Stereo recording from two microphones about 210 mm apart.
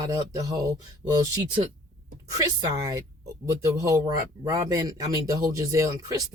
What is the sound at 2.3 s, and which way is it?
Speech, 15° right (ahead or behind).